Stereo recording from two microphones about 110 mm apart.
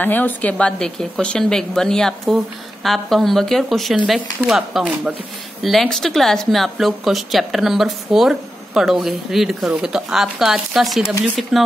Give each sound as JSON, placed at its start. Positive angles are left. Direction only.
{"t": 0.0, "sound": "speech", "side_deg": 15}